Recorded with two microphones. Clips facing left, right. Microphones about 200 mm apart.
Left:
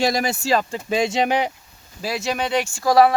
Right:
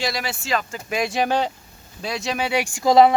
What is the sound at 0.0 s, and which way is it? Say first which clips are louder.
Speech: left 6 dB; 45° left (ahead or behind).